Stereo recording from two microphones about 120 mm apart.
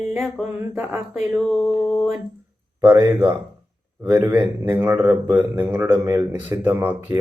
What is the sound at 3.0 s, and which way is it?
A man's voice, 15° right (ahead or behind).